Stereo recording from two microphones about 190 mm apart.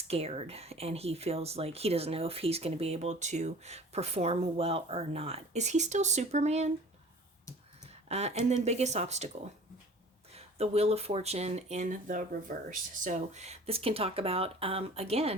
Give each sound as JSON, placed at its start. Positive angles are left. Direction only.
{"t": 0.1, "sound": "speech", "side_deg": -30}
{"t": 8.0, "sound": "speech", "side_deg": -35}
{"t": 10.3, "sound": "speech", "side_deg": -30}